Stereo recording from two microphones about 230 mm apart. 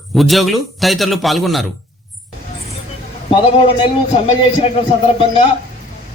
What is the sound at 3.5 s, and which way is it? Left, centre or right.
Speech, left.